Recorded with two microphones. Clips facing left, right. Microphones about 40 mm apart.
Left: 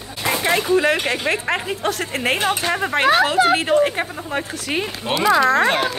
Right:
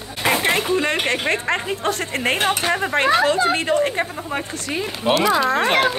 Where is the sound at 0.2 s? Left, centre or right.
Right.